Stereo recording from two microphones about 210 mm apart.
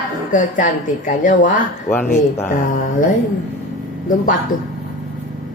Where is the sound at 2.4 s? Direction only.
40° left (ahead or behind).